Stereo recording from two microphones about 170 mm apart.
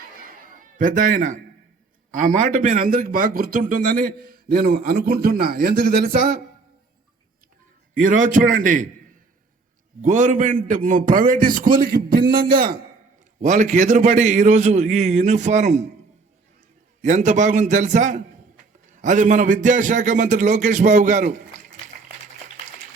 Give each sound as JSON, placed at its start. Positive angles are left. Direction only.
{"t": 0.3, "sound": "a sound", "side_deg": -55}
{"t": 2.1, "sound": "a man's voice", "side_deg": -50}
{"t": 8.0, "sound": "a man's voice", "side_deg": -50}
{"t": 10.0, "sound": "a man's voice", "side_deg": -50}
{"t": 13.4, "sound": "a man's voice", "side_deg": -45}
{"t": 17.0, "sound": "a man's voice", "side_deg": -45}